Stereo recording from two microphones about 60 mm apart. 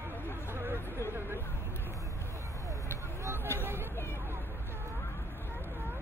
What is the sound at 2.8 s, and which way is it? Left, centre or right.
Vehicle, right.